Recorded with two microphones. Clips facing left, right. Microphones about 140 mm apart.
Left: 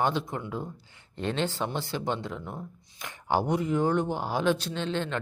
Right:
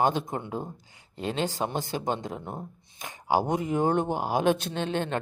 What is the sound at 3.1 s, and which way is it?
Speech, 15° right (ahead or behind).